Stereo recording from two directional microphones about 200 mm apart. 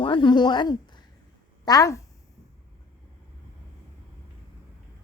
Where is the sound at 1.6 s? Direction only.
20° left (ahead or behind).